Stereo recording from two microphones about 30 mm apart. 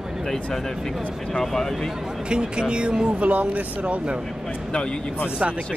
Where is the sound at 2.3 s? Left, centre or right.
Right.